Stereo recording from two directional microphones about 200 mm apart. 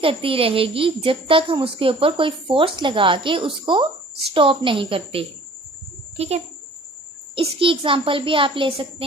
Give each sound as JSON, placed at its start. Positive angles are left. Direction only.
{"t": 0.0, "sound": "a woman's voice", "side_deg": -25}